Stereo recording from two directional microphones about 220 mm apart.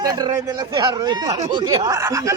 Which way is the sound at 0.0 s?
15° right (ahead or behind).